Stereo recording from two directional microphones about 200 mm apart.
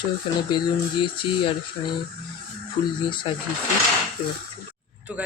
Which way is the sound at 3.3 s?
25° left (ahead or behind).